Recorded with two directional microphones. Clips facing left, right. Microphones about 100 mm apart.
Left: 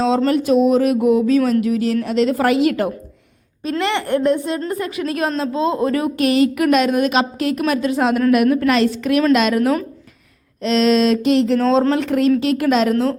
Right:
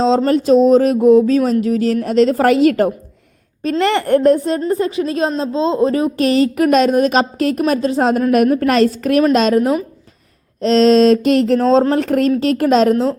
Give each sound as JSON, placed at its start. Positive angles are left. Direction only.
{"t": 0.3, "sound": "a woman's voice", "side_deg": -35}
{"t": 4.7, "sound": "a woman's voice", "side_deg": -30}